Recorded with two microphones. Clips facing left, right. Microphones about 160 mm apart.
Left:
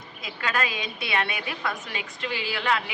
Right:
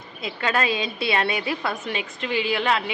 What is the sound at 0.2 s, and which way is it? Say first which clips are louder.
A woman's voice: right 4 dB; 25° right (ahead or behind).